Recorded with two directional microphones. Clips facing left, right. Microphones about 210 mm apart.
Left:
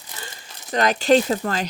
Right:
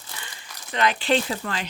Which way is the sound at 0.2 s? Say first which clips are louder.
Left 4 dB; 40° left (ahead or behind).